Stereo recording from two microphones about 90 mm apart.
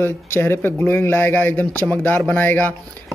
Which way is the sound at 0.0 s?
25° left (ahead or behind).